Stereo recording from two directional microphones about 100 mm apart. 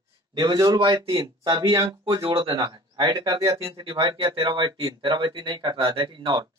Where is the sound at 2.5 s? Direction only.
40° right (ahead or behind).